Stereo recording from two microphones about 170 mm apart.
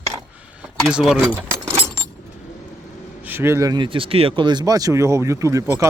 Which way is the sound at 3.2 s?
15° right (ahead or behind).